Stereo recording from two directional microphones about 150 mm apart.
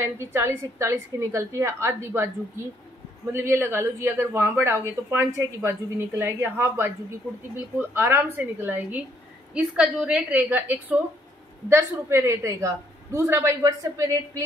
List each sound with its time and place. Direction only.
0.0 s a woman's voice: 15° right (ahead or behind)